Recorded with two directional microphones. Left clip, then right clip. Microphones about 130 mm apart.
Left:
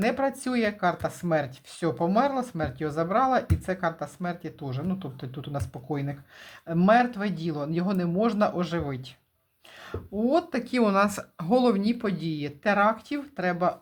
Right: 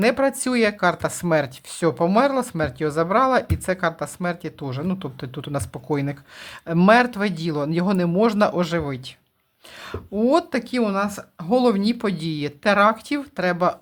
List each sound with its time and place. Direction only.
0.0 s speech: 40° right (ahead or behind)
10.8 s speech: 5° left (ahead or behind)
11.5 s speech: 20° right (ahead or behind); by 13.7 s 40° right (ahead or behind)